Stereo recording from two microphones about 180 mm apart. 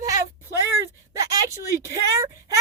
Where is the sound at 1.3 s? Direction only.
15° right (ahead or behind).